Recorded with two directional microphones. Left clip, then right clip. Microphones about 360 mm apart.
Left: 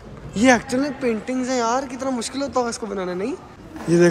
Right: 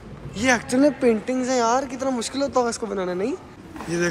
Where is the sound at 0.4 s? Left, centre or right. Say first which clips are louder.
Left 4 dB; centre.